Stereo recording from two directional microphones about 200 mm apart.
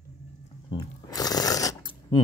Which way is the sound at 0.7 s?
20° left (ahead or behind).